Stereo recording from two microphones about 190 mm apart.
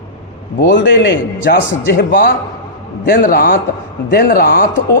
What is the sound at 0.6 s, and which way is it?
Speech, 65° left (ahead or behind).